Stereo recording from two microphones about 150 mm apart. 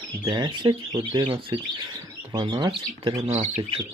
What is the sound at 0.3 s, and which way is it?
Speech, 30° right (ahead or behind).